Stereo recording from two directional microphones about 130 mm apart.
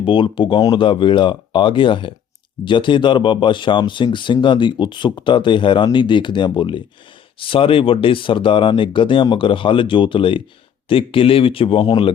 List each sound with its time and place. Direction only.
0.0 s speech: 40° left (ahead or behind)